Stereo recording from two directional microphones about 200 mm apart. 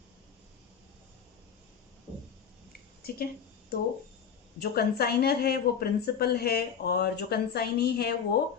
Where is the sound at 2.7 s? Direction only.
50° left (ahead or behind).